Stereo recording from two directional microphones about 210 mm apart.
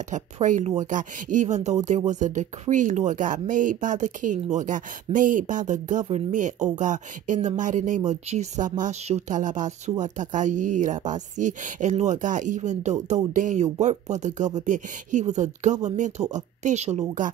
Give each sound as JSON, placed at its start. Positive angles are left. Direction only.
{"t": 0.1, "sound": "speech", "side_deg": -35}